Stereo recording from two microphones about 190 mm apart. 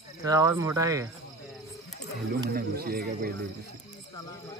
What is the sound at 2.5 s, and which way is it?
Speech, 55° right (ahead or behind).